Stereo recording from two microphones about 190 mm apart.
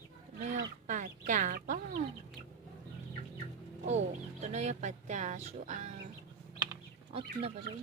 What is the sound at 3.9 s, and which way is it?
Speech, 35° right (ahead or behind).